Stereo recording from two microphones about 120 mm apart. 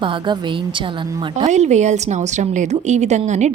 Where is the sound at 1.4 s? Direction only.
75° right (ahead or behind).